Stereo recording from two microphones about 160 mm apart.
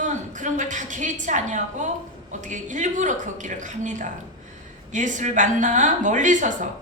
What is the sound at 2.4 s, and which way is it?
A woman's voice, 50° right (ahead or behind).